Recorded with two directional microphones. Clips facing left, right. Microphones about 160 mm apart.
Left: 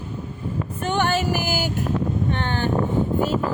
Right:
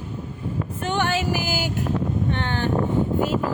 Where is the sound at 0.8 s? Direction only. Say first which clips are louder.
Left 2 dB; 45° left (ahead or behind).